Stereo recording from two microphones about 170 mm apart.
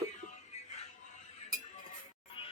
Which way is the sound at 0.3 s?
45° left (ahead or behind).